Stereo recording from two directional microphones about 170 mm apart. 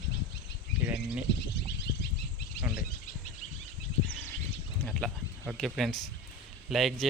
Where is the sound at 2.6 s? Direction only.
70° left (ahead or behind).